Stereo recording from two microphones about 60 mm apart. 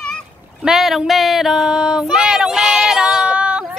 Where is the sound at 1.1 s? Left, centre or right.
Centre.